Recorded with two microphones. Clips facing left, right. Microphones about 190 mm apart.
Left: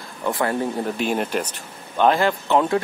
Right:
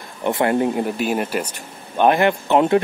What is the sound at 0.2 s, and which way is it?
Speech, 25° right (ahead or behind).